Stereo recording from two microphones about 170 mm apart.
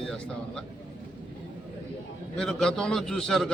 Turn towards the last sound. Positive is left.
turn(degrees=5)  # may be behind; listen again after turning